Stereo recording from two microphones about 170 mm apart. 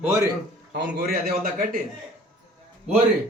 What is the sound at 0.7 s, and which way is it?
Speech, 70° right (ahead or behind).